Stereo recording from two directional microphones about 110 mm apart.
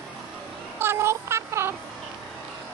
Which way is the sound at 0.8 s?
20° right (ahead or behind).